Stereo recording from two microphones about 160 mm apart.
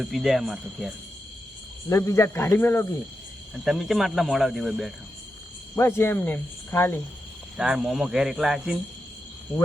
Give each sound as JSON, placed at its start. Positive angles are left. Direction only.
{"t": 0.0, "sound": "speech", "side_deg": 0}
{"t": 1.9, "sound": "speech", "side_deg": 20}
{"t": 3.5, "sound": "speech", "side_deg": 0}
{"t": 5.7, "sound": "speech", "side_deg": 15}
{"t": 7.5, "sound": "speech", "side_deg": -5}